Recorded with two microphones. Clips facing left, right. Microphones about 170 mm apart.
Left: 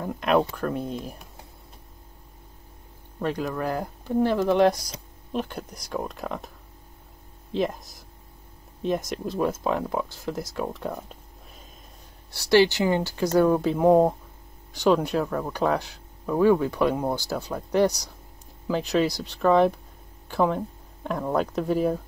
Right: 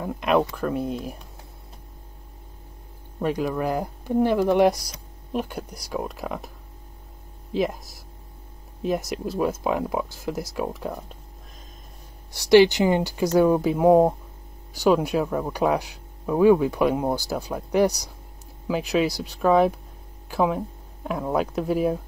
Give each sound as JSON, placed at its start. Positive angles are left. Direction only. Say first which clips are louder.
{"t": 0.0, "sound": "speech", "louder": "right 1 dB", "side_deg": -5}
{"t": 3.2, "sound": "speech", "louder": "right 3 dB", "side_deg": -10}
{"t": 8.8, "sound": "speech", "louder": "right 1 dB", "side_deg": -5}
{"t": 12.4, "sound": "speech", "louder": "right 4 dB", "side_deg": -15}